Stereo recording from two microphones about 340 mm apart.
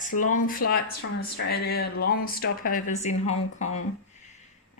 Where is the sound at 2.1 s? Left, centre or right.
Left.